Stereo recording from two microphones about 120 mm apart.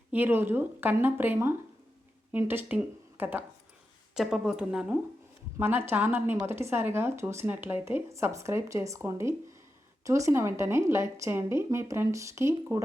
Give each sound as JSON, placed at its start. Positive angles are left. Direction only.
{"t": 0.1, "sound": "speech", "side_deg": -15}
{"t": 4.1, "sound": "speech", "side_deg": 0}
{"t": 5.5, "sound": "speech", "side_deg": -20}